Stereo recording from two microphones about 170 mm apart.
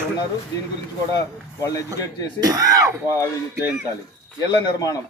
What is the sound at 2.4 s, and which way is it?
Speech, 20° right (ahead or behind).